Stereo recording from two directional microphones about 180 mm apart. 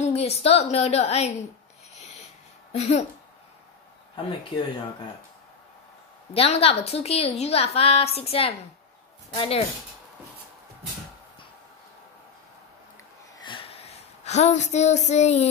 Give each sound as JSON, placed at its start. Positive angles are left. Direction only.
{"t": 0.0, "sound": "a woman's voice", "side_deg": 35}
{"t": 2.7, "sound": "a woman's voice", "side_deg": 40}
{"t": 6.3, "sound": "a woman's voice", "side_deg": 35}
{"t": 13.4, "sound": "a sound", "side_deg": 30}